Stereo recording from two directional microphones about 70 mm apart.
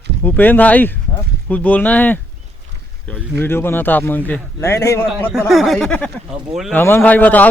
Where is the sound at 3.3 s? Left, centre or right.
Left.